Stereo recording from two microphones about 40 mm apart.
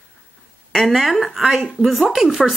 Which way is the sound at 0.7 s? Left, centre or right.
Centre.